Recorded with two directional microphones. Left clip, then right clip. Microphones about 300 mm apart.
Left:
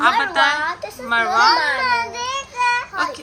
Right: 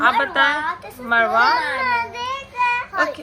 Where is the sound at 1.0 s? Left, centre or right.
Centre.